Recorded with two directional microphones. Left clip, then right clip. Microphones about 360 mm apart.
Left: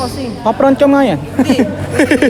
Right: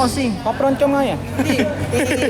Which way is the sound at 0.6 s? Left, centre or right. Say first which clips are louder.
Left 7 dB; left.